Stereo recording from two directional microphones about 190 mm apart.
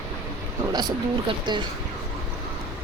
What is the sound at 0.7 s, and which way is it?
Speech, 25° right (ahead or behind).